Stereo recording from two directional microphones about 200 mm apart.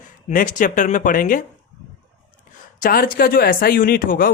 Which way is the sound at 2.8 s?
45° left (ahead or behind).